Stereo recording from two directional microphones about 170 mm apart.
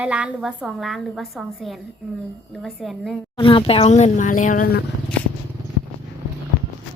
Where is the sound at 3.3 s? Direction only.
30° left (ahead or behind); by 4.8 s 55° left (ahead or behind).